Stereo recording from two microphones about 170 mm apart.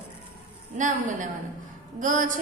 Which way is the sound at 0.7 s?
50° right (ahead or behind).